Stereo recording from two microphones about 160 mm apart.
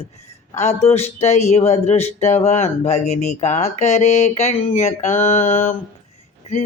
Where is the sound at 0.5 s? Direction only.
45° left (ahead or behind).